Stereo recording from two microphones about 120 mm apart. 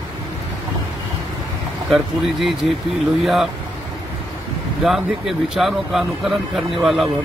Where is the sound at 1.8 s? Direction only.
Centre (ahead or behind).